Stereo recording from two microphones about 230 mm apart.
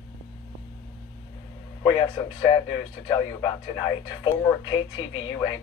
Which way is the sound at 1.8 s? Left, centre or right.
Centre.